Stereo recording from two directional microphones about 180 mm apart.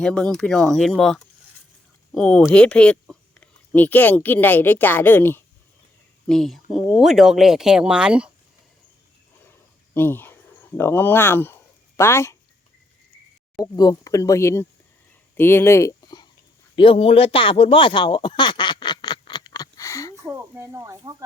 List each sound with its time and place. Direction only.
0.0 s speech: 5° left (ahead or behind)
9.9 s speech: 10° left (ahead or behind)
13.7 s speech: 20° left (ahead or behind)
20.2 s speech: 15° right (ahead or behind)